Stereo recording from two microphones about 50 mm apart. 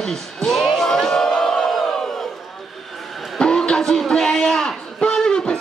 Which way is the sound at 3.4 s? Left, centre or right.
Centre.